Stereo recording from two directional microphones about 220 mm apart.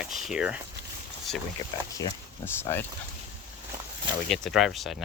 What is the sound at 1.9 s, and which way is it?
Speech, 15° left (ahead or behind).